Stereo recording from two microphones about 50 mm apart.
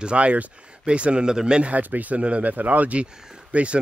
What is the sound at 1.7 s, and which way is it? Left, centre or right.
Speech, right.